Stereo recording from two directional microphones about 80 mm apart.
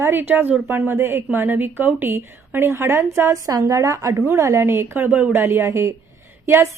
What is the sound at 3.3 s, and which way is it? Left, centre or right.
A woman's voice, right.